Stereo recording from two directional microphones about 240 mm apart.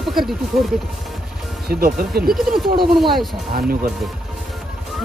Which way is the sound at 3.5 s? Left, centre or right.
Right.